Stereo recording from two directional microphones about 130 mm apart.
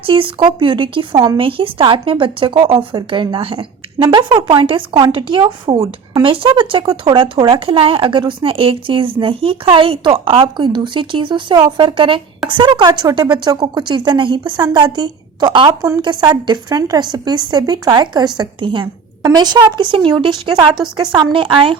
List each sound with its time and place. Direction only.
0.0 s a woman's voice: 40° right (ahead or behind)
4.0 s a woman's voice: 30° right (ahead or behind)